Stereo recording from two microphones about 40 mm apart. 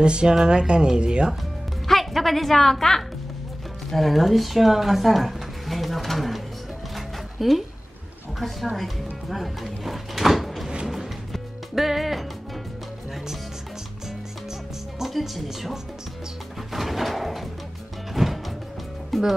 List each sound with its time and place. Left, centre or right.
0.0 s speech: right
1.9 s a woman's voice: centre
7.0 s music: centre
8.4 s a woman's voice: centre
10.9 s music: centre
15.0 s speech: centre
16.7 s a sound: centre
18.1 s music: centre